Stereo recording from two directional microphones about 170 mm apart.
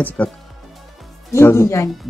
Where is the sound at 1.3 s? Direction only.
15° left (ahead or behind).